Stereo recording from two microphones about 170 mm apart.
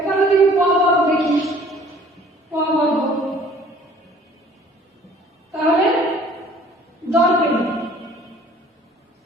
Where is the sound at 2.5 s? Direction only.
15° right (ahead or behind).